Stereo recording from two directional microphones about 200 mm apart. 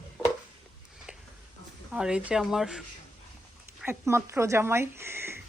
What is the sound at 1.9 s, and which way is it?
Speech, 5° right (ahead or behind).